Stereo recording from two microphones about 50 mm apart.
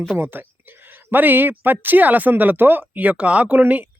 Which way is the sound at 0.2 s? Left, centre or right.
Right.